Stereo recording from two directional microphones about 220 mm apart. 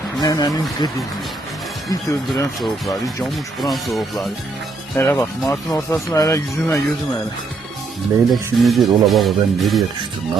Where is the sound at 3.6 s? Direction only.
Centre (ahead or behind).